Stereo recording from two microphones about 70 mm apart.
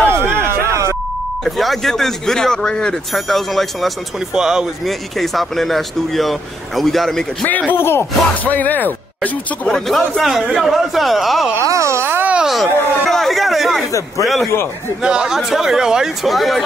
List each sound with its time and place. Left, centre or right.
0.1 s a sound: right
1.4 s speech: centre
4.4 s speech: centre
4.8 s speech: centre
7.7 s speech: left
8.5 s speech: left
9.7 s speech: centre
11.5 s speech: right
12.4 s a sound: centre
14.2 s speech: centre
15.0 s speech: centre